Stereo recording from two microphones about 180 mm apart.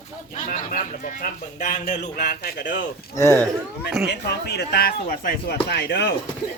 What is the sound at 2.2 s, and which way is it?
Speech, 60° left (ahead or behind).